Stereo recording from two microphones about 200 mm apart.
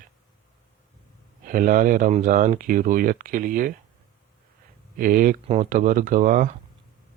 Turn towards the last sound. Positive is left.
turn(degrees=-40)  # may be behind; listen again after turning